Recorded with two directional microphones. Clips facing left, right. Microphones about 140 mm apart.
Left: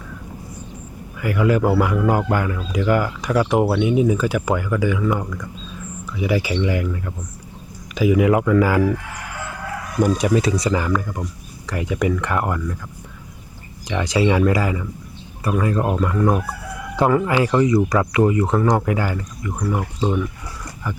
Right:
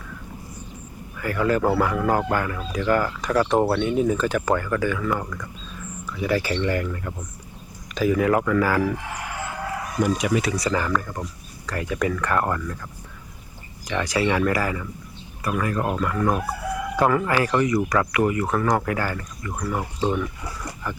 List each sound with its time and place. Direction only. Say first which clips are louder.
1.2 s a man's voice: left 3 dB; 15° left (ahead or behind)
10.0 s speech: left 5 dB; 35° left (ahead or behind)
10.5 s a man's voice: left 3 dB; 20° left (ahead or behind)
13.8 s speech: left 4 dB; 20° left (ahead or behind)